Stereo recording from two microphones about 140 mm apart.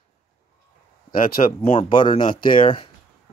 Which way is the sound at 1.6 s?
40° left (ahead or behind).